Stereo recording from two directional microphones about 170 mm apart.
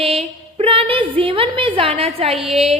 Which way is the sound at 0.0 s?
35° right (ahead or behind).